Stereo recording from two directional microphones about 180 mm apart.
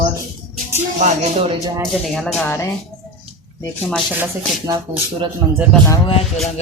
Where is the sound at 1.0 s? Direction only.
40° right (ahead or behind).